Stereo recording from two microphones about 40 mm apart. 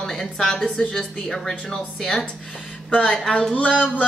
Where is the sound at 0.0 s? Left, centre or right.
Centre.